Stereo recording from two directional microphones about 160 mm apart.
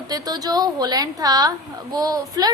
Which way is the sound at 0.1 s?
25° right (ahead or behind).